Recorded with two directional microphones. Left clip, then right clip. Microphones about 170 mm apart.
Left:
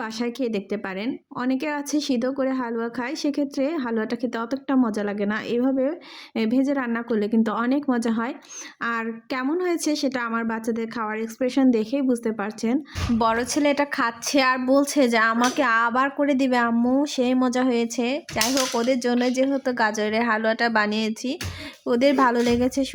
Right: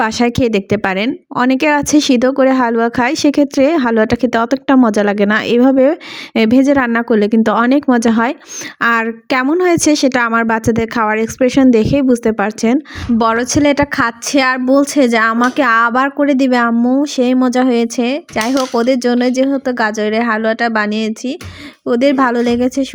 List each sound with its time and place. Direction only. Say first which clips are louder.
0.0 s speech: right 14 dB; 55° right (ahead or behind)
13.1 s speech: right 9 dB; 30° right (ahead or behind)